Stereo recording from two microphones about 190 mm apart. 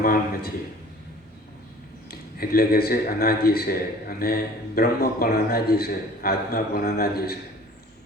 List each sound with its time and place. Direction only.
0.0 s a man's voice: 50° left (ahead or behind)
2.0 s a man's voice: 50° left (ahead or behind)